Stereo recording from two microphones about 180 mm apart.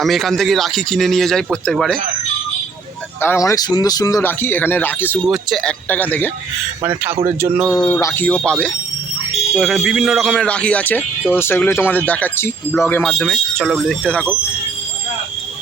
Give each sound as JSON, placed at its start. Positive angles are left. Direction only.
{"t": 0.0, "sound": "a man's voice", "side_deg": 0}
{"t": 3.2, "sound": "speech", "side_deg": 15}
{"t": 5.3, "sound": "a man's voice", "side_deg": 0}
{"t": 5.9, "sound": "speech", "side_deg": 10}
{"t": 7.3, "sound": "speech", "side_deg": -15}
{"t": 7.9, "sound": "speech", "side_deg": 10}